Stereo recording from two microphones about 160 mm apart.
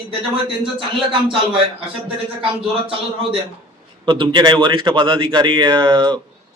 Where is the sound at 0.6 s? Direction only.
30° right (ahead or behind).